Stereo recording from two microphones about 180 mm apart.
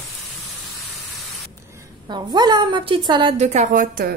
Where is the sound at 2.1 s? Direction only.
25° right (ahead or behind).